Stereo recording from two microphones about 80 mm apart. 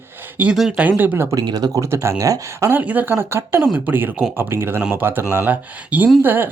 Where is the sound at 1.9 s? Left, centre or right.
Right.